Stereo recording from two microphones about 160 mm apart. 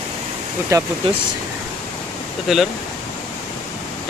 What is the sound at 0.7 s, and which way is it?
Speech, 20° right (ahead or behind).